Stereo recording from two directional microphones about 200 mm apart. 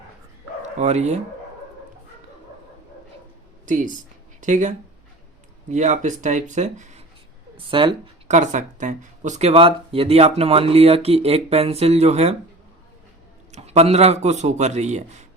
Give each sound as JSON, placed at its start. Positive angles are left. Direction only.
{"t": 0.6, "sound": "speech", "side_deg": -35}
{"t": 3.7, "sound": "speech", "side_deg": -40}
{"t": 5.7, "sound": "speech", "side_deg": -35}
{"t": 7.7, "sound": "speech", "side_deg": -25}
{"t": 8.4, "sound": "speech", "side_deg": -40}
{"t": 13.5, "sound": "speech", "side_deg": -30}